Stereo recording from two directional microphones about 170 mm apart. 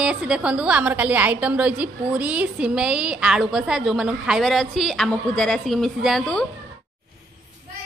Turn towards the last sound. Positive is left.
turn(degrees=5)  # may be behind; listen again after turning